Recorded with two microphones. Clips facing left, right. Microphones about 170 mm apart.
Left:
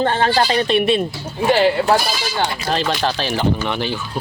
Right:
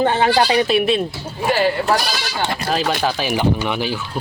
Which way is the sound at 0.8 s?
Centre (ahead or behind).